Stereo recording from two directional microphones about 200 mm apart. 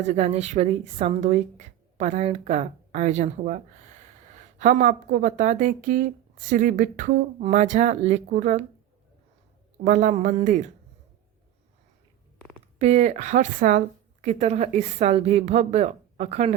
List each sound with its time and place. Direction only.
0.1 s speech: 30° right (ahead or behind)
4.6 s speech: 40° right (ahead or behind)
9.8 s speech: 40° right (ahead or behind)
12.8 s speech: 35° right (ahead or behind)